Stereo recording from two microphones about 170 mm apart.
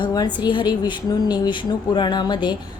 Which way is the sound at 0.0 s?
25° left (ahead or behind).